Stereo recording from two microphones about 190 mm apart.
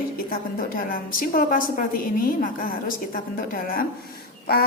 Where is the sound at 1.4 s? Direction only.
45° left (ahead or behind).